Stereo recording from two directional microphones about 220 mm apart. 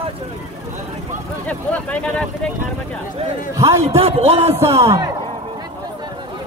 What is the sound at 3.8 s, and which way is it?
Speech, 25° right (ahead or behind).